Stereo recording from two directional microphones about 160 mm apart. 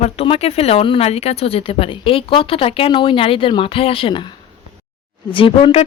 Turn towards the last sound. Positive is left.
turn(degrees=35)  # may be behind; listen again after turning